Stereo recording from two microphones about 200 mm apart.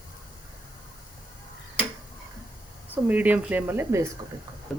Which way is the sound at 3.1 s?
10° right (ahead or behind).